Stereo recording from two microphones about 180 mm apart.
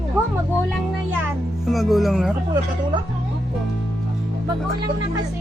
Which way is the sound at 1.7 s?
Centre (ahead or behind).